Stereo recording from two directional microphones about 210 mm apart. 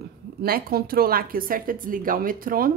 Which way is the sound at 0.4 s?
45° right (ahead or behind).